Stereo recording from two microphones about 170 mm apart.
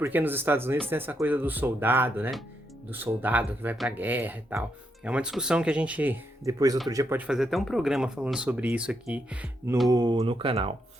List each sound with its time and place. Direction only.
0.0 s speech: 10° right (ahead or behind)
9.9 s speech: 20° right (ahead or behind)